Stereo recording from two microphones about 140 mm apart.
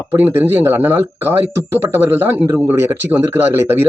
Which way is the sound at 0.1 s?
15° right (ahead or behind).